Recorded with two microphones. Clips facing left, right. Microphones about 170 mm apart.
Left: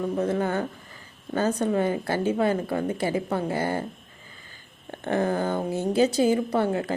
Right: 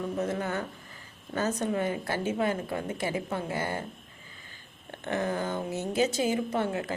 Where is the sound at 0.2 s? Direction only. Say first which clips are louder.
Left 6 dB; 30° left (ahead or behind).